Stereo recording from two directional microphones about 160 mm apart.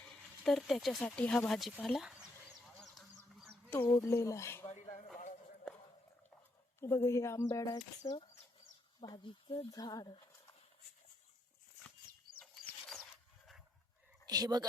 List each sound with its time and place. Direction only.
0.4 s speech: centre (ahead or behind)
2.6 s goose: centre (ahead or behind)
3.9 s speech: 15° left (ahead or behind)
4.7 s a sound: 45° left (ahead or behind)
6.7 s speech: 15° left (ahead or behind)
14.3 s speech: 25° right (ahead or behind)